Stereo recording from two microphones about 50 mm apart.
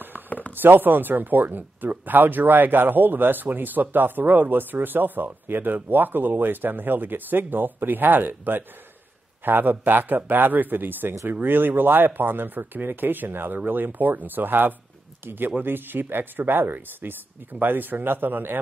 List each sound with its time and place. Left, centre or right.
0.6 s speech: right